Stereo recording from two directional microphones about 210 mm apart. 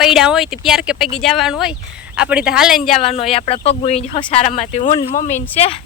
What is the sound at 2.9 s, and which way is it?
Speech, 30° left (ahead or behind).